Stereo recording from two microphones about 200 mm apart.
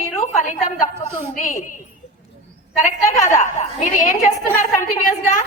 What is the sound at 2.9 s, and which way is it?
A woman's voice, 40° left (ahead or behind).